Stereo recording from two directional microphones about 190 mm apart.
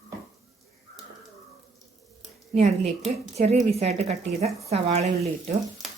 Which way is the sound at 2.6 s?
35° right (ahead or behind).